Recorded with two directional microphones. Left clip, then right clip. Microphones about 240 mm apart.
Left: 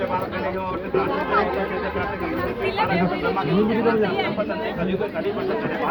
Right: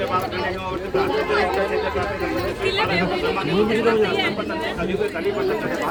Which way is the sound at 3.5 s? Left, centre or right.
Left.